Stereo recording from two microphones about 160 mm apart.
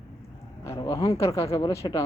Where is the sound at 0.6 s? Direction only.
20° left (ahead or behind).